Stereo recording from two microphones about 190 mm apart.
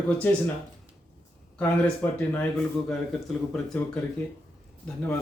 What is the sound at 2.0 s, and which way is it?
Speech, 10° left (ahead or behind).